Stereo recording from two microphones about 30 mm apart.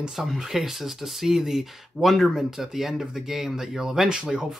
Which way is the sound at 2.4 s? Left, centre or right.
Centre.